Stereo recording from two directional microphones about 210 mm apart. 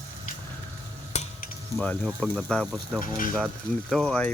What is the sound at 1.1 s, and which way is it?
Stir, 30° left (ahead or behind).